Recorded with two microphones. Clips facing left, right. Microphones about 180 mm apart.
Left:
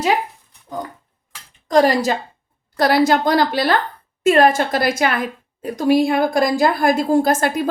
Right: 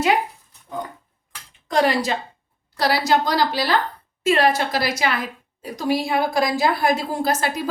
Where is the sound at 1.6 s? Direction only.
40° left (ahead or behind).